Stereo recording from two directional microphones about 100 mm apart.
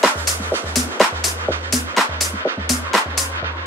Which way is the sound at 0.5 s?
20° left (ahead or behind).